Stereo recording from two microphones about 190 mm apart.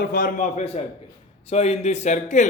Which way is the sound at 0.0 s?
50° left (ahead or behind).